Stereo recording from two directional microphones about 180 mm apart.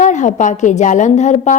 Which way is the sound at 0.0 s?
45° left (ahead or behind).